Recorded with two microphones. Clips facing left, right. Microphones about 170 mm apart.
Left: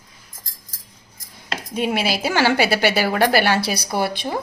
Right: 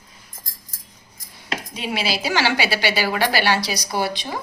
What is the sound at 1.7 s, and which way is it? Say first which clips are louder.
A woman's voice: left 5 dB; 50° left (ahead or behind).